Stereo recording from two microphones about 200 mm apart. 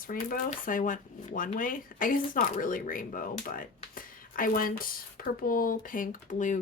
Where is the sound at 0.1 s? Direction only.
45° left (ahead or behind).